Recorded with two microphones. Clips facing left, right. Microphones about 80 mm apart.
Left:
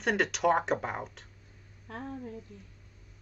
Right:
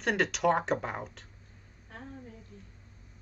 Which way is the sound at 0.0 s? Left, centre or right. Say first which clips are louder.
Even; centre.